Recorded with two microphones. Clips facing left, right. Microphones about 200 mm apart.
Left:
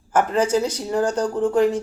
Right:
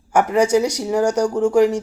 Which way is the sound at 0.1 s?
15° right (ahead or behind).